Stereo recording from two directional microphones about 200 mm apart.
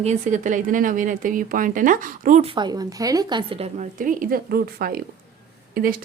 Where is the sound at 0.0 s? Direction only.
35° right (ahead or behind).